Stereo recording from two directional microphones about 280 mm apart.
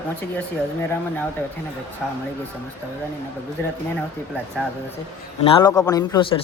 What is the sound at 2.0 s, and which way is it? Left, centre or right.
Speech, centre.